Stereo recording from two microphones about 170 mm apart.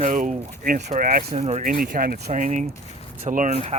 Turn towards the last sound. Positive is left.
turn(degrees=-45)  # may be behind; listen again after turning